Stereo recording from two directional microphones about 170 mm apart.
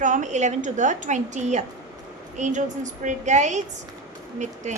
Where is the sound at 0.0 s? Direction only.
45° right (ahead or behind).